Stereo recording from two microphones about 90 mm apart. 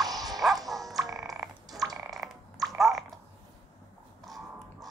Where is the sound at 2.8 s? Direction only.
Centre (ahead or behind).